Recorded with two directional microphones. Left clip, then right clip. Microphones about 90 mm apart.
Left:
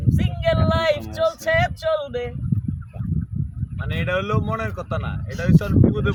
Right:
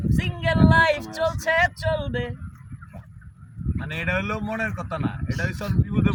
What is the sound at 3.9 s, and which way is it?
Speech, 15° left (ahead or behind).